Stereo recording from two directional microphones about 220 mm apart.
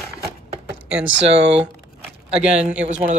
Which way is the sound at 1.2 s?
25° right (ahead or behind).